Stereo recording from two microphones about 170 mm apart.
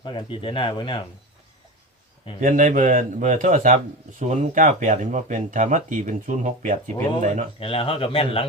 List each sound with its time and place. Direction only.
0.0 s speech: 30° left (ahead or behind)
2.4 s speech: 50° right (ahead or behind)
7.6 s speech: 30° left (ahead or behind)